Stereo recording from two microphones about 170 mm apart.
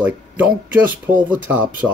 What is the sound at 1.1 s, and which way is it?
Speech, 50° right (ahead or behind).